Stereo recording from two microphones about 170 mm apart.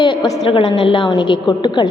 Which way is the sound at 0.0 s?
30° left (ahead or behind).